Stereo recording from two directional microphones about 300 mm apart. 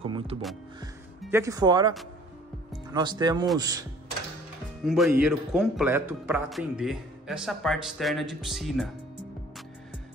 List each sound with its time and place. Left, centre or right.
0.0 s speech: centre
4.8 s a man's voice: centre